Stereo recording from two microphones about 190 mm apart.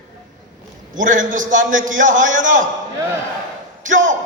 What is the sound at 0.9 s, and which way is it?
A man's voice, 45° right (ahead or behind).